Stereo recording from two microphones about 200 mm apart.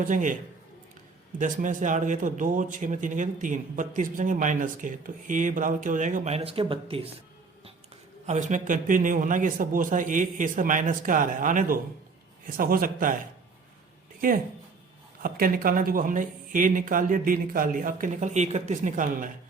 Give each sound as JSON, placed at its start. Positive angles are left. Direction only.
{"t": 0.0, "sound": "a man's voice", "side_deg": -40}
{"t": 1.4, "sound": "a man's voice", "side_deg": -40}
{"t": 8.3, "sound": "a man's voice", "side_deg": -35}
{"t": 14.2, "sound": "speech", "side_deg": -45}